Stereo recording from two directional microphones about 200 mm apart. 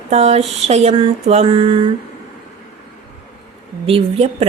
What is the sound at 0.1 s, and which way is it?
Speech, 30° right (ahead or behind).